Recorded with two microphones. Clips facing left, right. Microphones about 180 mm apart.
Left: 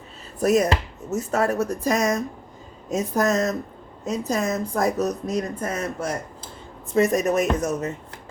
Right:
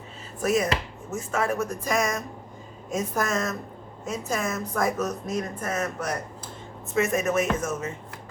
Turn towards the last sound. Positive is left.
turn(degrees=40)  # may be behind; listen again after turning